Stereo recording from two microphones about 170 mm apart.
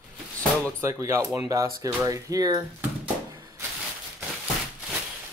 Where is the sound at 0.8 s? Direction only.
15° right (ahead or behind).